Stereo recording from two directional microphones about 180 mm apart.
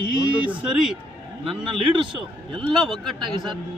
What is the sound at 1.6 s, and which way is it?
Speech, 25° right (ahead or behind).